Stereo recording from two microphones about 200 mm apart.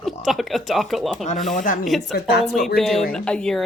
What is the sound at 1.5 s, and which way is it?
Speech, 40° left (ahead or behind).